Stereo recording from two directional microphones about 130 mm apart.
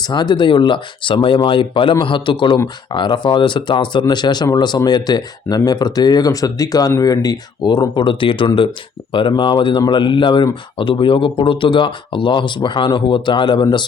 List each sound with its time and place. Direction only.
0.0 s speech: 35° left (ahead or behind)